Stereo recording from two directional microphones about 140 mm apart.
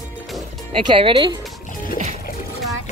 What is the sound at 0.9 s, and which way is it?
Speech, 40° right (ahead or behind).